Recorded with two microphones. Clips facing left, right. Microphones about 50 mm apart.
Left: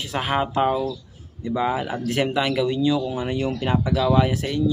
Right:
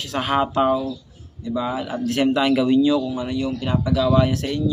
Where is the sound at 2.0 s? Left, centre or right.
Centre.